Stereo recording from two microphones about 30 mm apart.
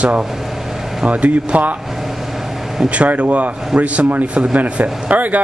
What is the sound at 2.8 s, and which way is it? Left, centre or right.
A man's voice, right.